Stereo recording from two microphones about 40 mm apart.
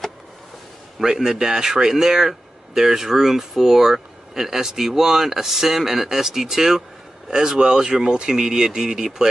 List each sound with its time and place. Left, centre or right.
0.9 s speech: centre